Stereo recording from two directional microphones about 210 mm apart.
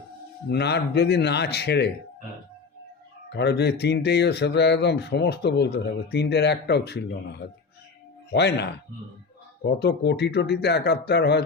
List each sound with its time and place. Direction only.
0.5 s speech: 50° left (ahead or behind)
3.2 s speech: 50° left (ahead or behind)
8.3 s speech: 55° left (ahead or behind)